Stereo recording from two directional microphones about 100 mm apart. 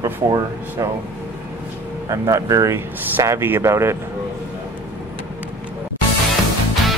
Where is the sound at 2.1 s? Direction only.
35° right (ahead or behind).